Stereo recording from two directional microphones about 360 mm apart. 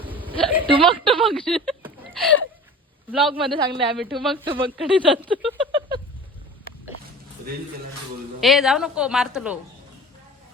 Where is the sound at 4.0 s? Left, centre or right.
Centre.